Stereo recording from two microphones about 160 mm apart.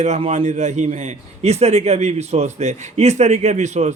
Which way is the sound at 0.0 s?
45° right (ahead or behind).